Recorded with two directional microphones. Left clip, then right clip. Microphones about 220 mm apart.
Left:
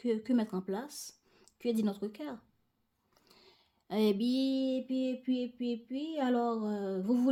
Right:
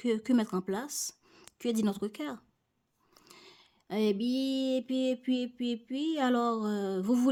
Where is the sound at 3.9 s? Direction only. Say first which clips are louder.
Even; 20° right (ahead or behind).